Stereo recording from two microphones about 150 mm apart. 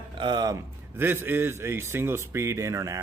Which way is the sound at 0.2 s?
30° right (ahead or behind).